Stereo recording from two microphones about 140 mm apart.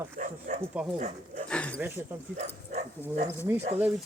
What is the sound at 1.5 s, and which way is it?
Speech, 10° left (ahead or behind).